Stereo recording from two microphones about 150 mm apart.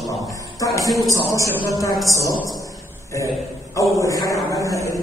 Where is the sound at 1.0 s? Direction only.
20° left (ahead or behind).